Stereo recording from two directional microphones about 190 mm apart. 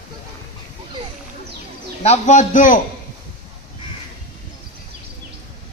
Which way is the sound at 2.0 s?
35° left (ahead or behind).